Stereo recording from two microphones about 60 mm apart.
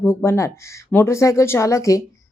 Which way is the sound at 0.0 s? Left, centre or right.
Left.